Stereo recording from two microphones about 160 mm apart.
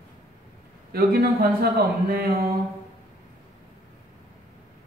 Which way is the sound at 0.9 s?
70° right (ahead or behind).